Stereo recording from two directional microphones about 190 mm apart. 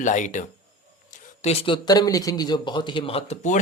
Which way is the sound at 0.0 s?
40° left (ahead or behind).